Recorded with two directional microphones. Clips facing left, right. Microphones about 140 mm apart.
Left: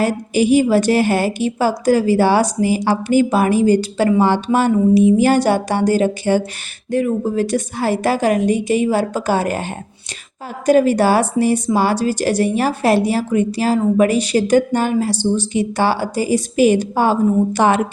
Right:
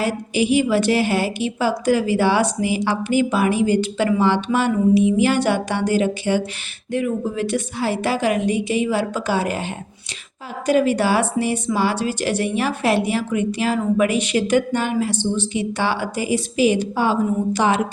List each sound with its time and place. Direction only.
0.0 s a woman's voice: 45° left (ahead or behind)
10.7 s a woman's voice: 40° left (ahead or behind)